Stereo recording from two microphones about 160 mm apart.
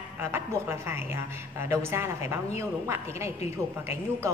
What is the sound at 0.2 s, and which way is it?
A woman's voice, 15° right (ahead or behind).